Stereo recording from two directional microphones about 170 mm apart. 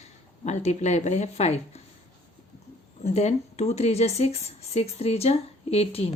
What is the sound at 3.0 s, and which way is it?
Speech, 40° left (ahead or behind).